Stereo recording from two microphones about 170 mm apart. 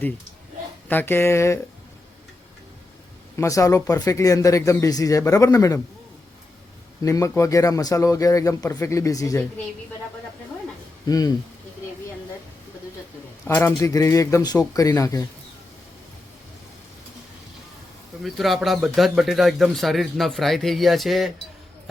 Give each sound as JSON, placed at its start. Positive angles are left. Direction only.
{"t": 0.9, "sound": "speech", "side_deg": 10}
{"t": 3.3, "sound": "a man's voice", "side_deg": 20}
{"t": 7.0, "sound": "a man's voice", "side_deg": 20}
{"t": 11.0, "sound": "speech", "side_deg": 20}
{"t": 13.4, "sound": "a man's voice", "side_deg": 15}
{"t": 18.2, "sound": "a man's voice", "side_deg": 0}